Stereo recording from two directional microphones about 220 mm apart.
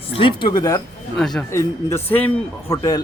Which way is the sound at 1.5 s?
10° left (ahead or behind).